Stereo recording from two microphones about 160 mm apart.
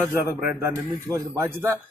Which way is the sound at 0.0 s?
10° right (ahead or behind).